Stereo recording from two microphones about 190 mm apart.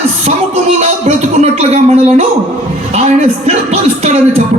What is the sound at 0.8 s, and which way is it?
A man's voice, 35° right (ahead or behind).